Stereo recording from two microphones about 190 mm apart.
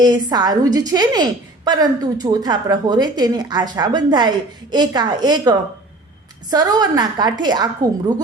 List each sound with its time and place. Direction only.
0.0 s a woman's voice: 20° right (ahead or behind)